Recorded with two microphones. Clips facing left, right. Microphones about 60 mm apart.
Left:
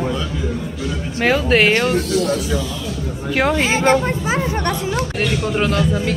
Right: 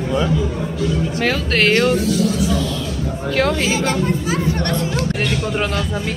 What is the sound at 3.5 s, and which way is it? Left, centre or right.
A woman's voice, left.